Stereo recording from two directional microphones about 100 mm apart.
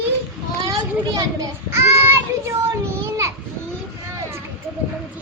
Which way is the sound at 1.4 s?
30° right (ahead or behind).